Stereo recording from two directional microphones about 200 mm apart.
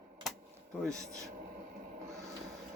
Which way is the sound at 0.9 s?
15° right (ahead or behind).